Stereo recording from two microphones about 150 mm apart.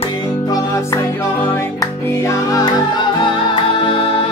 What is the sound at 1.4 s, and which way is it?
Music, 15° left (ahead or behind).